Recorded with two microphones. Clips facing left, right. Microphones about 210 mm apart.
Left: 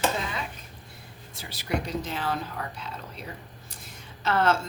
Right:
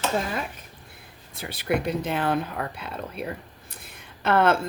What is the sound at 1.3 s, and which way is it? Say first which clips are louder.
Speech: right 5 dB; 60° right (ahead or behind).